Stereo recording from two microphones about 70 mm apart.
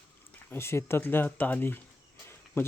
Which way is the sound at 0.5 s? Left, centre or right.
Left.